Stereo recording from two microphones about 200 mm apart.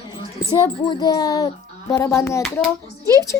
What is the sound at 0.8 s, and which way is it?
A woman's voice, 20° left (ahead or behind).